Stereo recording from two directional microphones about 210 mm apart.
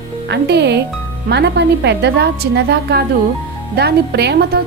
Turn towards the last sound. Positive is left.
turn(degrees=-50)  # may be behind; listen again after turning